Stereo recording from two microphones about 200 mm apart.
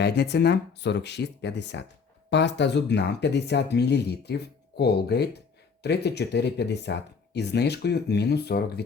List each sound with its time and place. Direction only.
0.0 s speech: 55° left (ahead or behind)